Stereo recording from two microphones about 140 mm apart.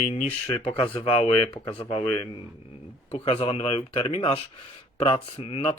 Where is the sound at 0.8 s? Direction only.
45° left (ahead or behind).